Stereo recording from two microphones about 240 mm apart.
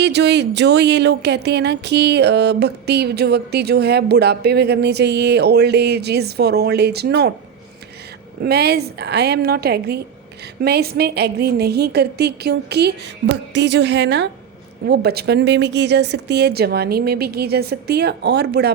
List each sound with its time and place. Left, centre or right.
0.0 s speech: right
8.4 s speech: right